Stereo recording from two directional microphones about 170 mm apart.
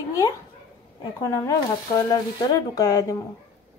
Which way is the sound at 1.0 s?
20° left (ahead or behind).